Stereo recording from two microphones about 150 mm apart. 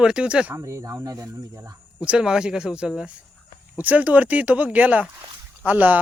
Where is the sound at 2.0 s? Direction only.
5° right (ahead or behind).